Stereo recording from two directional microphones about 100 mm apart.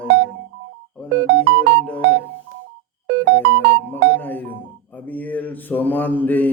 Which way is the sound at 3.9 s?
20° left (ahead or behind).